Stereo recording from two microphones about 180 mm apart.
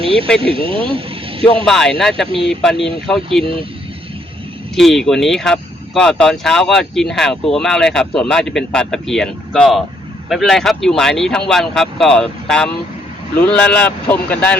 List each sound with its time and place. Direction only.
0.0 s a sound: 30° right (ahead or behind)
0.4 s speech: 30° right (ahead or behind)
1.5 s speech: 5° left (ahead or behind)
3.4 s speech: 30° right (ahead or behind)
4.7 s speech: centre (ahead or behind)